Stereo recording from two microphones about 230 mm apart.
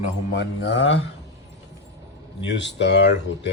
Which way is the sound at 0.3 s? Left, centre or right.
Left.